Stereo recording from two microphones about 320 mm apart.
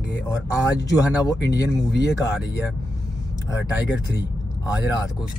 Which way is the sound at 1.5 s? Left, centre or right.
Left.